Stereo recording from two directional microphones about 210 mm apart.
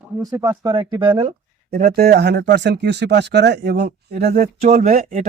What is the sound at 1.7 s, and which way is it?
Speech, 45° right (ahead or behind).